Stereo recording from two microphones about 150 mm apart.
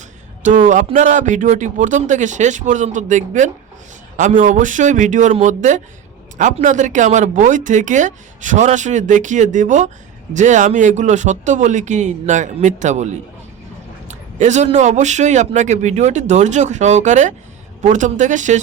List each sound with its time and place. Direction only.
0.4 s a man's voice: 55° right (ahead or behind)